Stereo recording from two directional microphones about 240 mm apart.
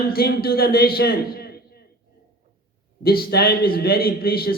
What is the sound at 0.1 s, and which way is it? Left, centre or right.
A man's voice, left.